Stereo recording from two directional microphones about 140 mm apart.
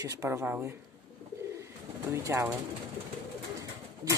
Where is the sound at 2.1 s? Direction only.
20° right (ahead or behind).